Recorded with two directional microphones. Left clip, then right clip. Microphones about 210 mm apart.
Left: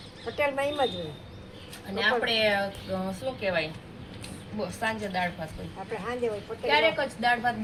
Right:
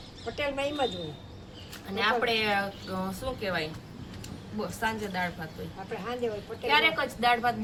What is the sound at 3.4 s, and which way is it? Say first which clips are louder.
Speech: left 4 dB; 20° left (ahead or behind).